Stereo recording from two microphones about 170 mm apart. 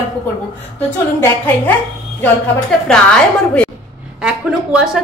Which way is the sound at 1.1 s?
10° left (ahead or behind).